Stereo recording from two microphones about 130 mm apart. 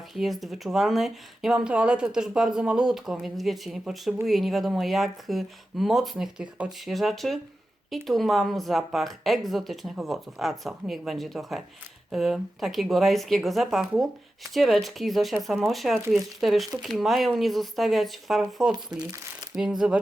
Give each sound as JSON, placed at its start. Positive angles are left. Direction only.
{"t": 0.1, "sound": "speech", "side_deg": 0}
{"t": 18.7, "sound": "speech", "side_deg": -30}
{"t": 19.5, "sound": "speech", "side_deg": -5}